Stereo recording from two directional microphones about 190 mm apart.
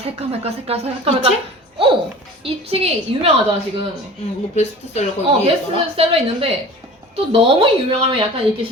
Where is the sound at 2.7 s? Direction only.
30° right (ahead or behind).